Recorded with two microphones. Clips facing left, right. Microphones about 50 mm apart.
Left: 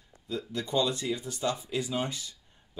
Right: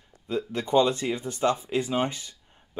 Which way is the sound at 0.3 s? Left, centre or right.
Right.